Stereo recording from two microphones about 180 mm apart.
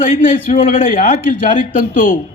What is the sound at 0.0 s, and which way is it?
A man's voice, 50° left (ahead or behind).